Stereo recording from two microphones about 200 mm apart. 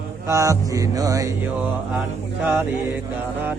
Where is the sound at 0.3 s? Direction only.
15° right (ahead or behind).